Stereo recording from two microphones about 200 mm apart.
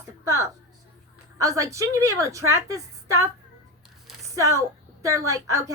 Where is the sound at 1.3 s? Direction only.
15° right (ahead or behind).